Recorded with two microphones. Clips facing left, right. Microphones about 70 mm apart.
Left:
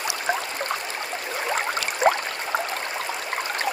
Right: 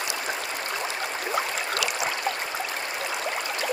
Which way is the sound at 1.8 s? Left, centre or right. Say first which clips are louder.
Left 9 dB; left.